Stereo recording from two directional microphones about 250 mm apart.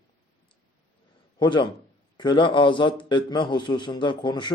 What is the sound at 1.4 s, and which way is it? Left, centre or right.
A man's voice, centre.